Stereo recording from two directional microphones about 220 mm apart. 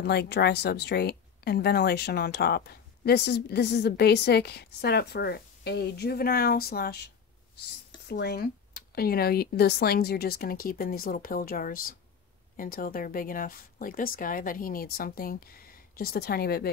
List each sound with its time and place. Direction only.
0.0 s a woman's voice: 50° left (ahead or behind)
8.1 s a woman's voice: 45° left (ahead or behind)